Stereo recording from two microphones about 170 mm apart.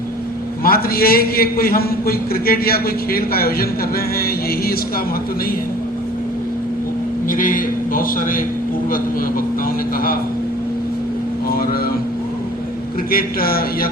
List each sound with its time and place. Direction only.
0.6 s a man's voice: 60° left (ahead or behind)
7.3 s a man's voice: 55° left (ahead or behind)
11.4 s a man's voice: 60° left (ahead or behind)
13.1 s a man's voice: 60° left (ahead or behind)